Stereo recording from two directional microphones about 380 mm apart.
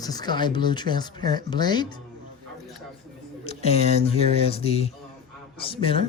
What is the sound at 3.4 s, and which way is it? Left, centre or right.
Speech, centre.